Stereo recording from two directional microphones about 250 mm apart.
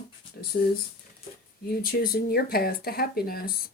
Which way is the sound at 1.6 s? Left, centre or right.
Left.